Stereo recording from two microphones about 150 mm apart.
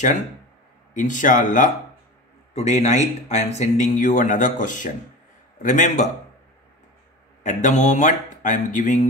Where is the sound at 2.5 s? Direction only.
50° left (ahead or behind).